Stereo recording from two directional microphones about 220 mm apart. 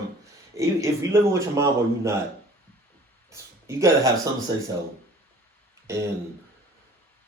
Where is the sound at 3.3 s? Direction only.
15° right (ahead or behind).